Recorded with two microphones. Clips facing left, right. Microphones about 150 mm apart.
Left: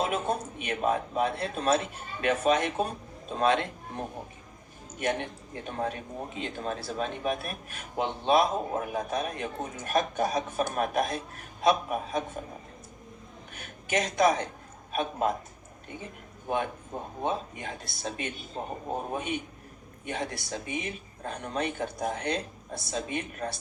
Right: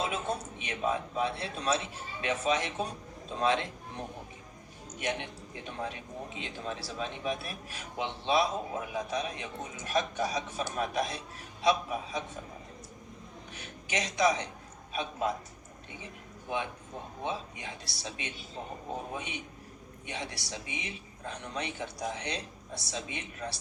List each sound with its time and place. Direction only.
0.0 s speech: 55° left (ahead or behind)
13.5 s a man's voice: 50° left (ahead or behind)
17.2 s speech: 50° left (ahead or behind)